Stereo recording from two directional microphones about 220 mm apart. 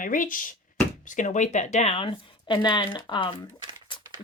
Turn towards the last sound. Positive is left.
turn(degrees=20)  # may be behind; listen again after turning